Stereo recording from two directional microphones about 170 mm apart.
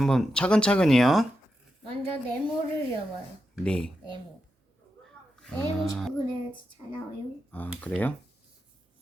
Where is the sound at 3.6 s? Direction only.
5° left (ahead or behind).